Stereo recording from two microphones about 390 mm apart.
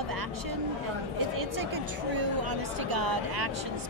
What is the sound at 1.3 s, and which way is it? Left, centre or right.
A woman's voice, right.